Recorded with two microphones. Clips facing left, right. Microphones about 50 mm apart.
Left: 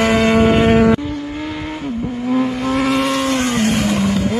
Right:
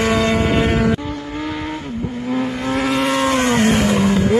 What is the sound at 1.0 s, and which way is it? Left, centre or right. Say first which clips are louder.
Vehicle: left 1 dB; centre.